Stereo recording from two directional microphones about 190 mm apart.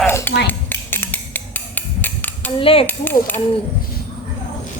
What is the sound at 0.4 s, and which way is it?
Dishes, 10° left (ahead or behind).